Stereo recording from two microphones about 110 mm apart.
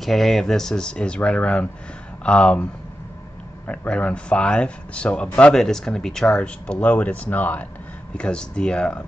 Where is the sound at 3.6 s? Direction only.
10° left (ahead or behind).